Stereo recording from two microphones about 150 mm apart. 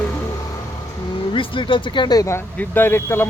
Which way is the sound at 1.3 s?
35° left (ahead or behind).